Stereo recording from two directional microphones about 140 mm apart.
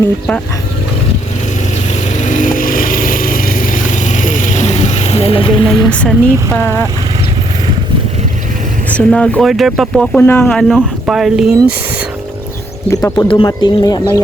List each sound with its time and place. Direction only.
2.2 s vehicle: 65° left (ahead or behind); by 5.6 s 40° left (ahead or behind)
5.9 s speech: 5° left (ahead or behind)
8.9 s speech: 10° left (ahead or behind)
12.9 s speech: 25° left (ahead or behind)